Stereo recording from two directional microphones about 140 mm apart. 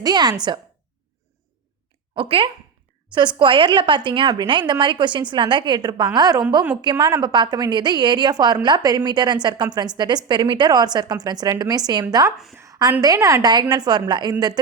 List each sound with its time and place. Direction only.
0.0 s speech: 30° right (ahead or behind)
2.1 s a woman's voice: 40° right (ahead or behind)
12.5 s a sound: 25° right (ahead or behind)
13.0 s speech: 25° right (ahead or behind)